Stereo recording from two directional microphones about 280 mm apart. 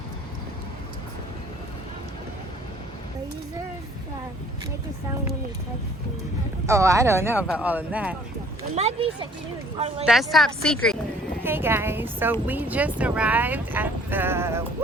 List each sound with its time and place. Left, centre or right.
6.7 s speech: centre
8.7 s speech: right
10.0 s speech: centre